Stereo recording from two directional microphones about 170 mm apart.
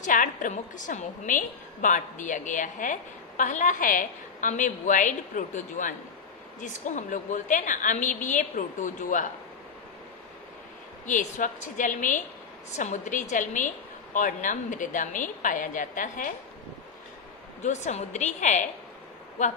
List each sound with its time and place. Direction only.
0.0 s a woman's voice: 50° left (ahead or behind)
11.1 s a woman's voice: 50° left (ahead or behind)
17.6 s a woman's voice: 45° left (ahead or behind)